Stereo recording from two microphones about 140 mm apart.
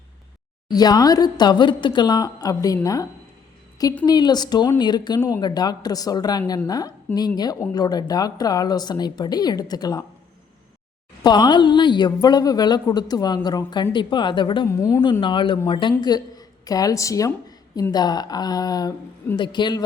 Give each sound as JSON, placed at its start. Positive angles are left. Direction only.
{"t": 0.7, "sound": "a woman's voice", "side_deg": 30}
{"t": 11.2, "sound": "a woman's voice", "side_deg": 30}
{"t": 14.7, "sound": "a woman's voice", "side_deg": 20}
{"t": 15.2, "sound": "a woman's voice", "side_deg": 35}